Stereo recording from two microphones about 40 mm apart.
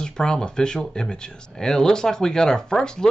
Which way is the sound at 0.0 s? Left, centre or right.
Left.